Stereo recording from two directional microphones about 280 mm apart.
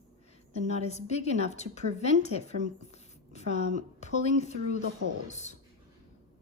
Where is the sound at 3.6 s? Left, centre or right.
Right.